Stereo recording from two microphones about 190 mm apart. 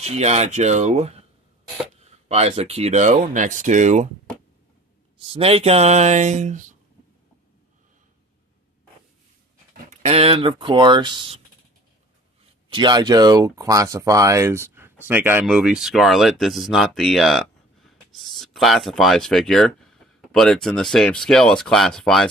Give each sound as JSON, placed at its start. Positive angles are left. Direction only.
{"t": 0.0, "sound": "speech", "side_deg": -35}
{"t": 2.2, "sound": "speech", "side_deg": -35}
{"t": 5.3, "sound": "speech", "side_deg": -30}
{"t": 9.8, "sound": "speech", "side_deg": -35}
{"t": 12.6, "sound": "speech", "side_deg": -25}